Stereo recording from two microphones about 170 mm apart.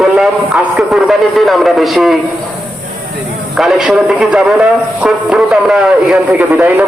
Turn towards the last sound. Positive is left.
turn(degrees=-10)  # may be behind; listen again after turning